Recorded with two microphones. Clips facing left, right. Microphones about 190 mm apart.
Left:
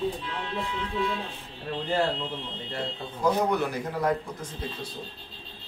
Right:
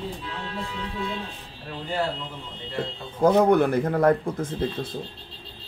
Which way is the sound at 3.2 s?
55° right (ahead or behind).